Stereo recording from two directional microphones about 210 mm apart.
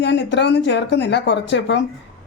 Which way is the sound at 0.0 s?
55° left (ahead or behind).